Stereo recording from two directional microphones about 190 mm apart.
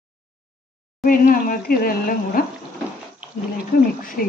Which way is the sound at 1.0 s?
45° left (ahead or behind).